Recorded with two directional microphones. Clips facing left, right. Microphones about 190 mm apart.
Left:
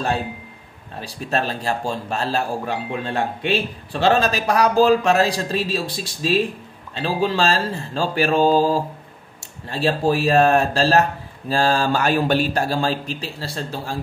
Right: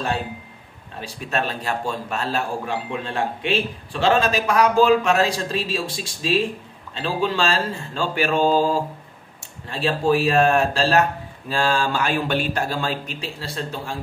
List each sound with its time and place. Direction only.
1.0 s speech: 35° left (ahead or behind)